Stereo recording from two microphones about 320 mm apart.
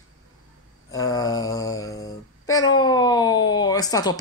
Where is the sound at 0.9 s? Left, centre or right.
Centre.